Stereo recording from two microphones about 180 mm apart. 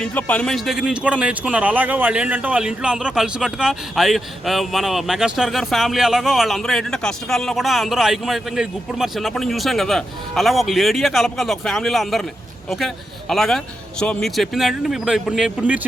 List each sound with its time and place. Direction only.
0.0 s speech: 10° left (ahead or behind); by 15.9 s 5° right (ahead or behind)